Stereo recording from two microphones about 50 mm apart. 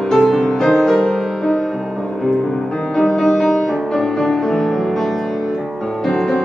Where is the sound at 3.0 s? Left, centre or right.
Centre.